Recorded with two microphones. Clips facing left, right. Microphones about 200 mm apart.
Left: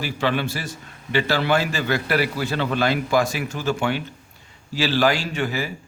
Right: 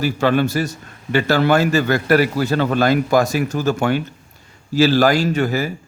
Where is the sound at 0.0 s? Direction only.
45° right (ahead or behind).